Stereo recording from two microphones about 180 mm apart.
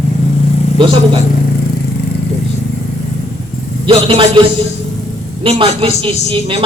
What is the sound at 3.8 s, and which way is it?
Speech, 30° right (ahead or behind).